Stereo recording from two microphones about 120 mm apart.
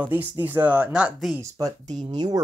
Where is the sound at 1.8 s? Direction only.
70° right (ahead or behind).